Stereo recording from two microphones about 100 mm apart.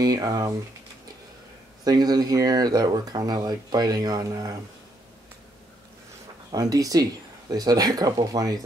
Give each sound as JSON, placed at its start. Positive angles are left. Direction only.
{"t": 0.0, "sound": "speech", "side_deg": -40}
{"t": 1.9, "sound": "speech", "side_deg": -40}
{"t": 6.5, "sound": "speech", "side_deg": -35}